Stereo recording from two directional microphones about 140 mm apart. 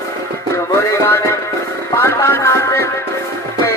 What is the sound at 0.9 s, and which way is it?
Music, 20° left (ahead or behind).